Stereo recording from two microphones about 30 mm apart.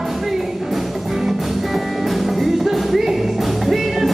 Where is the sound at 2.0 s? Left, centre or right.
Centre.